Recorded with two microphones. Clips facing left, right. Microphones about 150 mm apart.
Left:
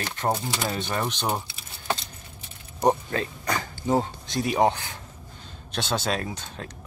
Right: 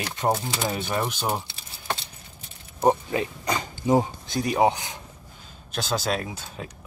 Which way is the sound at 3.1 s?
15° right (ahead or behind).